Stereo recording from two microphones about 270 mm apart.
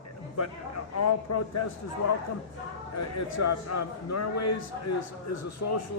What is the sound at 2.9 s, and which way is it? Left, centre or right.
A man's voice, left.